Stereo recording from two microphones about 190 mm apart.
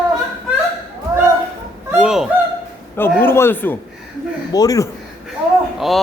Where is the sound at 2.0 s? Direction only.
5° right (ahead or behind).